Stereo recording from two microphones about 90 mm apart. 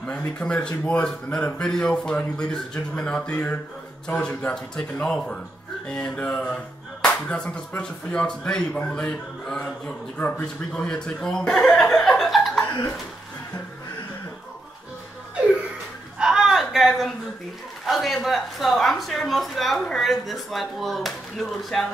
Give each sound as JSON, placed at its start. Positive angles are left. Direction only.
{"t": 0.4, "sound": "music", "side_deg": 10}
{"t": 10.4, "sound": "speech", "side_deg": 10}
{"t": 16.2, "sound": "a sound", "side_deg": -5}
{"t": 17.8, "sound": "speech", "side_deg": 0}